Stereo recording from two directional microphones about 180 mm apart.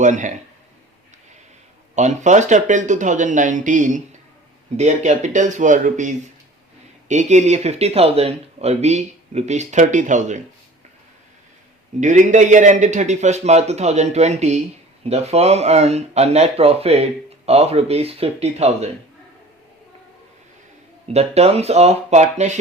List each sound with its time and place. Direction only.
0.0 s speech: 45° right (ahead or behind)
2.0 s speech: 40° right (ahead or behind)
11.9 s speech: 45° right (ahead or behind)
21.1 s speech: 35° right (ahead or behind)